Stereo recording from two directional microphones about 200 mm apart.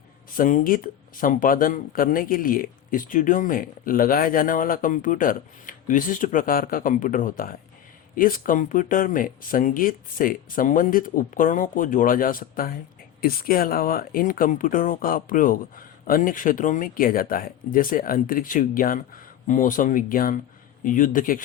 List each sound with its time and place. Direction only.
0.3 s speech: 40° left (ahead or behind)